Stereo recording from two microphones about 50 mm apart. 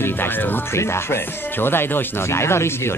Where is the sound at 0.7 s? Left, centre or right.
Left.